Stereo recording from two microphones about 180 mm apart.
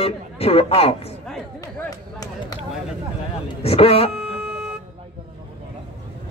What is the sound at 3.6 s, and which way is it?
Speech, 35° left (ahead or behind).